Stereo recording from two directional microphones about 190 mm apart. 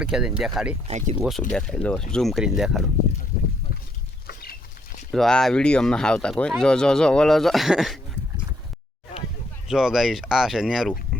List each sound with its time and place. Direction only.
0.0 s speech: 5° right (ahead or behind)
0.9 s speech: 40° right (ahead or behind)
1.2 s speech: centre (ahead or behind)
4.3 s a sound: 50° left (ahead or behind)
5.1 s speech: centre (ahead or behind)
9.6 s speech: 5° right (ahead or behind)